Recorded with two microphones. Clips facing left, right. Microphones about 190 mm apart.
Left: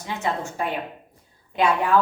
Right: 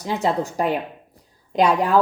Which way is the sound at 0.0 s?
35° right (ahead or behind).